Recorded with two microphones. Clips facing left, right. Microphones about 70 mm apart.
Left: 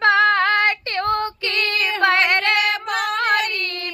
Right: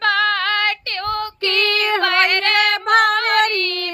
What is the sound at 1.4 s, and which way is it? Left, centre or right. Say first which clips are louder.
Female singing: right 3 dB; right.